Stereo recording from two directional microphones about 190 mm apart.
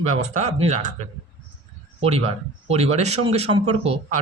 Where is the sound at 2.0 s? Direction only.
30° right (ahead or behind).